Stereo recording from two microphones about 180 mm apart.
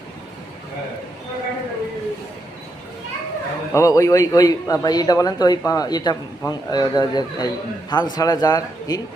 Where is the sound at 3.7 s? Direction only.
15° left (ahead or behind).